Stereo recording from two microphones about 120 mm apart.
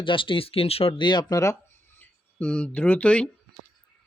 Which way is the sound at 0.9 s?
40° left (ahead or behind).